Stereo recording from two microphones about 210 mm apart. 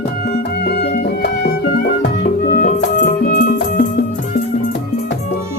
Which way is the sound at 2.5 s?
40° left (ahead or behind).